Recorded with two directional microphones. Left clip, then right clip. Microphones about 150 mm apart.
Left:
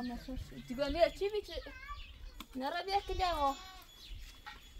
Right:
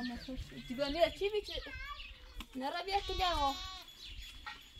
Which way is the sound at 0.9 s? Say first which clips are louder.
Left 1 dB; 20° left (ahead or behind).